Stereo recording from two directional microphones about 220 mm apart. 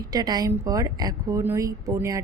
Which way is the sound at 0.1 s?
20° right (ahead or behind).